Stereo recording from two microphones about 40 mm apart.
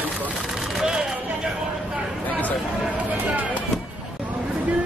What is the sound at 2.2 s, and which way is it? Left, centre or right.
Speech, left.